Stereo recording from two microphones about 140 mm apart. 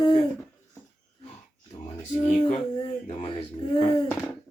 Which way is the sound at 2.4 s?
40° left (ahead or behind).